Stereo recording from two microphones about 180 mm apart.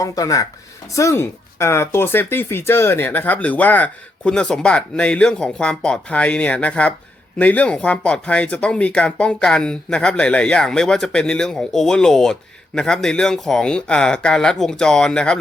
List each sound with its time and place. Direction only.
0.0 s speech: 20° left (ahead or behind)